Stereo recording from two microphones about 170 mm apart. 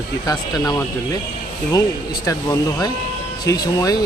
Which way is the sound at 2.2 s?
20° left (ahead or behind).